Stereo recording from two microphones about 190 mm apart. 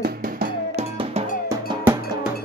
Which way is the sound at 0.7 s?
35° right (ahead or behind).